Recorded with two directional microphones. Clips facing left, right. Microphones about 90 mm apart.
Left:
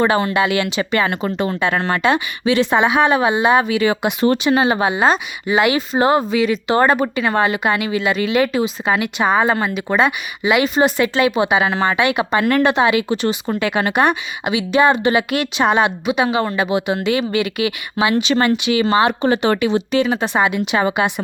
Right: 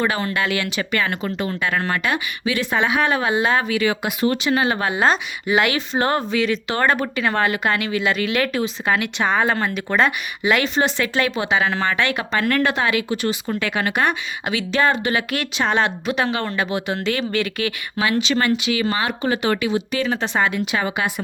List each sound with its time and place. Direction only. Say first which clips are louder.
0.0 s speech: left 6 dB; 25° left (ahead or behind)
4.9 s speech: left 2 dB; 5° left (ahead or behind); by 20.1 s 30° left (ahead or behind)
20.1 s speech: left 3 dB; 15° left (ahead or behind)